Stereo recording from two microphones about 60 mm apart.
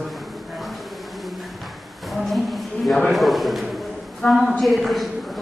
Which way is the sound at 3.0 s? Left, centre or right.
Centre.